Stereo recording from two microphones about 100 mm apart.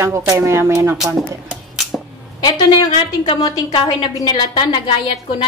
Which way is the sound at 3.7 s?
50° left (ahead or behind).